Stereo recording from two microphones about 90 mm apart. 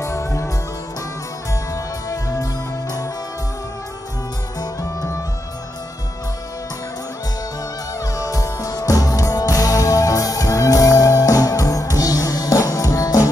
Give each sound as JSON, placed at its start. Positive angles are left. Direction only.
{"t": 0.0, "sound": "music", "side_deg": 35}
{"t": 1.5, "sound": "music", "side_deg": 40}
{"t": 4.6, "sound": "music", "side_deg": 35}
{"t": 8.0, "sound": "music", "side_deg": 40}